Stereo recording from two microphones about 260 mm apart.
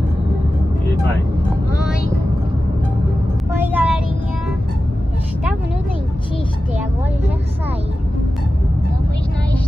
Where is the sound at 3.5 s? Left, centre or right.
Centre.